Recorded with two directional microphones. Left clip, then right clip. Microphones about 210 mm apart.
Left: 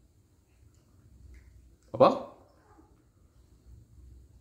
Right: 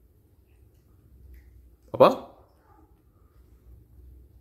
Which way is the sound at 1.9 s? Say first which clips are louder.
Right 4 dB; 15° right (ahead or behind).